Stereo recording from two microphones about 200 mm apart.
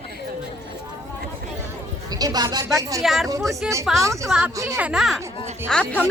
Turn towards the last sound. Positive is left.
turn(degrees=5)  # may be behind; listen again after turning